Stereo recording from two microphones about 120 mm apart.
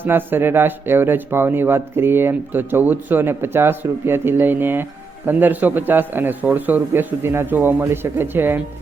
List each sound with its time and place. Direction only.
0.0 s speech: 15° right (ahead or behind)